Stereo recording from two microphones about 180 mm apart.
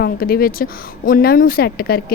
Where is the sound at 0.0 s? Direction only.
55° left (ahead or behind).